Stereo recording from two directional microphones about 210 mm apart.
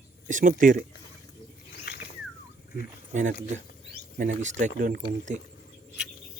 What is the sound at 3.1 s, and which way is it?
Speech, 35° right (ahead or behind).